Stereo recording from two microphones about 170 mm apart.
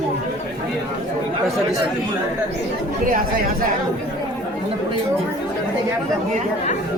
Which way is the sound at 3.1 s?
55° right (ahead or behind).